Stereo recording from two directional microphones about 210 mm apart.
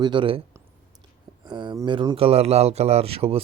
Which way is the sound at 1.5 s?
20° right (ahead or behind).